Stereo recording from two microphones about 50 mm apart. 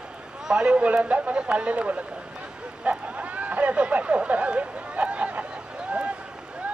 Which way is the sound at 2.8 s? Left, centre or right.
Right.